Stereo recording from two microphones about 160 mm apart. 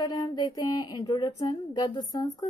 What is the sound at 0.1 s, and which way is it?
Speech, 25° left (ahead or behind).